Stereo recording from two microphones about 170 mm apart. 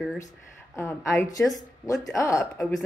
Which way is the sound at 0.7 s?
15° left (ahead or behind).